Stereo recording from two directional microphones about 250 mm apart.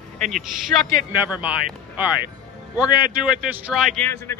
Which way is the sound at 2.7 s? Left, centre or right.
Centre.